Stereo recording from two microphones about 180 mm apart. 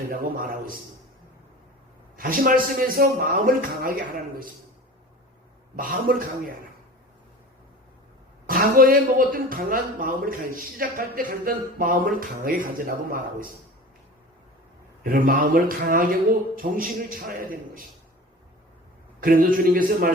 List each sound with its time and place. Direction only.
0.1 s speech: 50° right (ahead or behind)
2.1 s speech: 50° right (ahead or behind)
5.7 s speech: 50° right (ahead or behind)
8.4 s speech: 50° right (ahead or behind)
15.0 s speech: 50° right (ahead or behind)
19.2 s speech: 50° right (ahead or behind)